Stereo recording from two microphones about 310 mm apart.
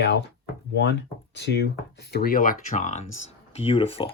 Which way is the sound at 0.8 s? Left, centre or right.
Left.